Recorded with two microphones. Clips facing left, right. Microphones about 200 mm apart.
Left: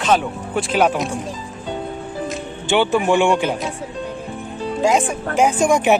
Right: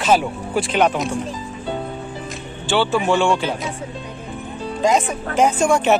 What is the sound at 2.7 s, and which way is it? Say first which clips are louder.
Speech: left 2 dB; 15° left (ahead or behind).